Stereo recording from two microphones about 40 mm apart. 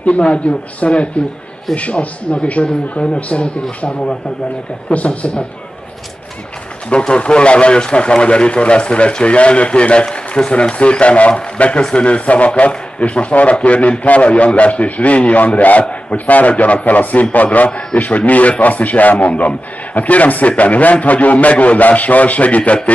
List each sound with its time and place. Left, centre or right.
0.0 s a man's voice: left
6.9 s a man's voice: left